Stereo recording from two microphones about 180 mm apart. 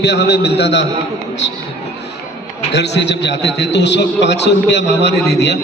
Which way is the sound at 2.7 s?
70° left (ahead or behind).